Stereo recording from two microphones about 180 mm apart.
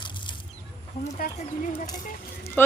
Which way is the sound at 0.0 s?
25° left (ahead or behind).